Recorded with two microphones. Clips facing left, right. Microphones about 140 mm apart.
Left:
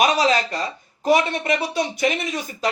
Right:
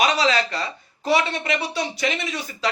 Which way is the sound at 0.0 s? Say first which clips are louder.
Left 2 dB; 45° left (ahead or behind).